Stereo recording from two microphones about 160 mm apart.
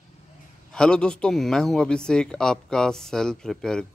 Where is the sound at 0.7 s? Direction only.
5° left (ahead or behind).